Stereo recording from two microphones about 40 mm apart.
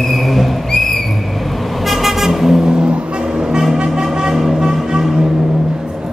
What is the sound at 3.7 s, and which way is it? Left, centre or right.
Music, centre.